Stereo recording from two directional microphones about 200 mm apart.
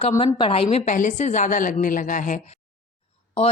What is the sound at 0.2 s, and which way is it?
A woman's voice, 25° left (ahead or behind).